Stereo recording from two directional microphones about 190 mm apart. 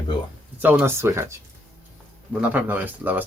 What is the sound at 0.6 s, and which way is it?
Speech, 10° right (ahead or behind).